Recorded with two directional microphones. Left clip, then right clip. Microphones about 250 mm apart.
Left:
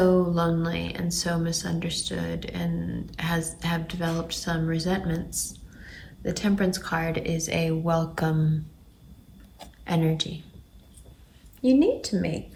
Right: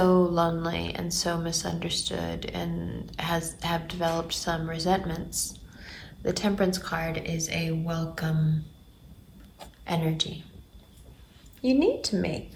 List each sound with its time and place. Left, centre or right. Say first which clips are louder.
0.0 s a woman's voice: even; centre
9.6 s a sound: left 3 dB; centre
11.6 s a woman's voice: left 2 dB; centre